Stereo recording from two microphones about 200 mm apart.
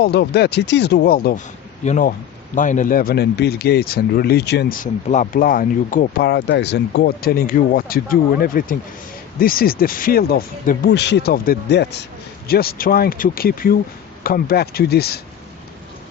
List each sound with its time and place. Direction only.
0.0 s speech: 55° left (ahead or behind)
1.8 s speech: 40° left (ahead or behind)
5.0 s speech: 35° left (ahead or behind)